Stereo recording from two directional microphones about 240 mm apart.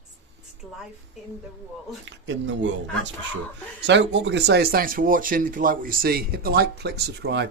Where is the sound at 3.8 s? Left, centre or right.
Right.